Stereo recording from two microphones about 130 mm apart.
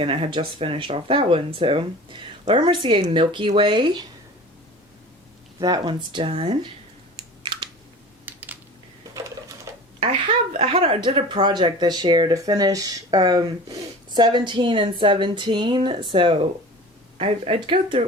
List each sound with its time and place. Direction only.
0.0 s speech: 45° right (ahead or behind)
5.5 s speech: 30° right (ahead or behind); by 6.6 s 50° right (ahead or behind)
7.2 s typing: 35° right (ahead or behind)
8.2 s typing: 15° right (ahead or behind)
9.7 s a sound: 25° right (ahead or behind)
10.0 s speech: 55° right (ahead or behind)